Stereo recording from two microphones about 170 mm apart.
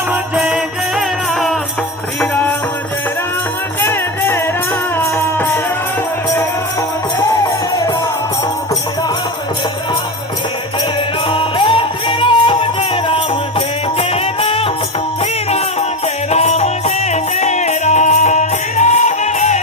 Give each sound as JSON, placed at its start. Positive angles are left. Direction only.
{"t": 0.1, "sound": "music", "side_deg": -5}
{"t": 2.3, "sound": "music", "side_deg": 10}
{"t": 4.9, "sound": "music", "side_deg": 10}
{"t": 7.2, "sound": "music", "side_deg": 20}
{"t": 11.3, "sound": "music", "side_deg": 30}
{"t": 14.1, "sound": "music", "side_deg": 35}
{"t": 16.3, "sound": "music", "side_deg": 40}